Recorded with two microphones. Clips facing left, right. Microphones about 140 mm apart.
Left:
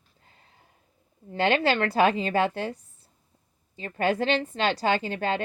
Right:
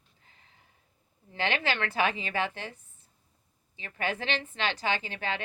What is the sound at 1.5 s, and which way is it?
A woman's voice, 45° left (ahead or behind).